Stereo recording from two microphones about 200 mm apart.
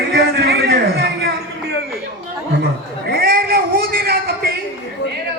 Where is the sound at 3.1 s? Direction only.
50° right (ahead or behind).